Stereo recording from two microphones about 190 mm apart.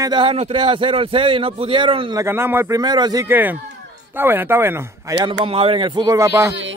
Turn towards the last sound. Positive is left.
turn(degrees=-15)  # may be behind; listen again after turning